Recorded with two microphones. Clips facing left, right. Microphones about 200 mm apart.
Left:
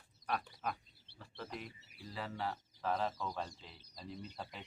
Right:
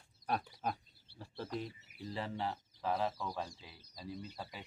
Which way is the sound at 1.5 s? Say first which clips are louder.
Right 6 dB; 30° right (ahead or behind).